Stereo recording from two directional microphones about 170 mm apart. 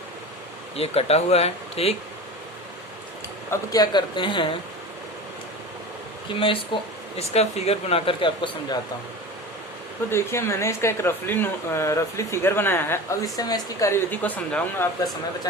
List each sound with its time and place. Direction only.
0.8 s speech: 35° left (ahead or behind)
3.5 s speech: 20° left (ahead or behind)
6.7 s speech: 30° left (ahead or behind)
10.1 s speech: 15° left (ahead or behind)